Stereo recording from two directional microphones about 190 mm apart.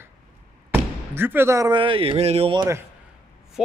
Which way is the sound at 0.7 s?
10° right (ahead or behind).